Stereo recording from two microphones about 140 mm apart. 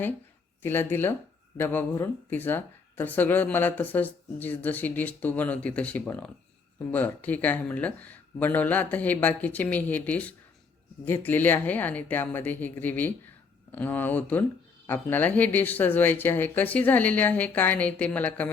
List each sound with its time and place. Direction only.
0.6 s speech: 15° left (ahead or behind)